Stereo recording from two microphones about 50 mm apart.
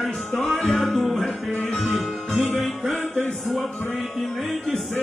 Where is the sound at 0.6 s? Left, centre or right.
Centre.